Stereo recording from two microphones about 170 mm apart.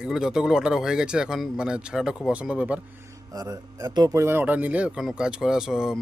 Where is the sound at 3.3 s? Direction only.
20° right (ahead or behind).